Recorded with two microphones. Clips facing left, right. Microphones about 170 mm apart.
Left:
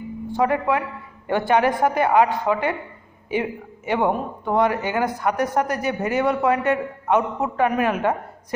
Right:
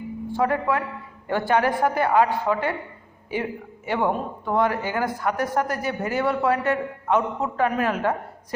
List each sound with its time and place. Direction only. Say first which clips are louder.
0.3 s a man's voice: left 2 dB; 15° left (ahead or behind)